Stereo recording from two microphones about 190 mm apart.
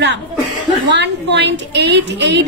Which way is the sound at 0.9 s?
65° right (ahead or behind).